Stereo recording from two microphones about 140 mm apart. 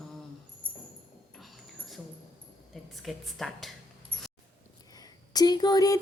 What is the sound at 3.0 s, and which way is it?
Speech, centre (ahead or behind).